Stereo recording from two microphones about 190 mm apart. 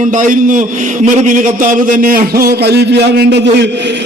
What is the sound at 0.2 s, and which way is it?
A man's voice, 45° right (ahead or behind).